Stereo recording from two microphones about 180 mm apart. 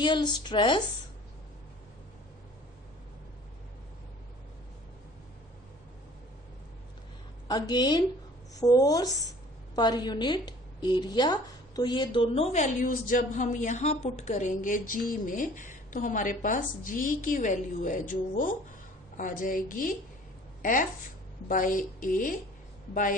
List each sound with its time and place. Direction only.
0.0 s speech: 25° left (ahead or behind)
7.4 s a woman's voice: 25° left (ahead or behind); by 22.4 s 45° left (ahead or behind)